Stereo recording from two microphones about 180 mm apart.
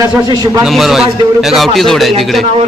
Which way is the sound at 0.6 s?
Centre (ahead or behind).